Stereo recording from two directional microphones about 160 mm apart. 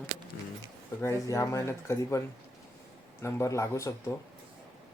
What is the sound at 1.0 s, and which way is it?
Speech, 20° left (ahead or behind).